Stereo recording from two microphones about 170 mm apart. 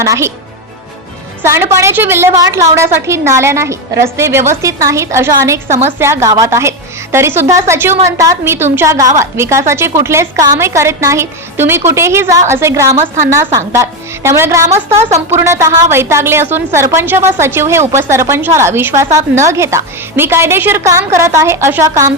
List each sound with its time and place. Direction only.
0.0 s a woman's voice: 20° right (ahead or behind)
1.4 s a woman's voice: 15° right (ahead or behind)